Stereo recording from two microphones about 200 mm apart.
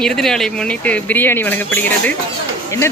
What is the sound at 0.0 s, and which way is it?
Speech, 5° left (ahead or behind).